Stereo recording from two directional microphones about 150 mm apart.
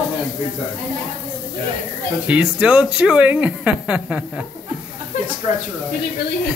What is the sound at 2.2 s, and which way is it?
Speech, 10° right (ahead or behind).